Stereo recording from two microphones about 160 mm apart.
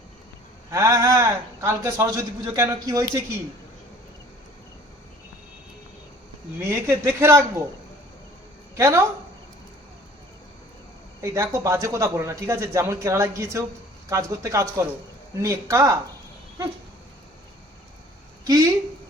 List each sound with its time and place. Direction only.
0.7 s a man's voice: 20° right (ahead or behind)
6.6 s a man's voice: 15° right (ahead or behind)
8.7 s speech: 15° right (ahead or behind)
11.2 s a man's voice: 20° right (ahead or behind)
18.4 s a man's voice: 20° right (ahead or behind)